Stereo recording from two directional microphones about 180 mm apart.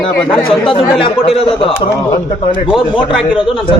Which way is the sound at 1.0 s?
30° left (ahead or behind).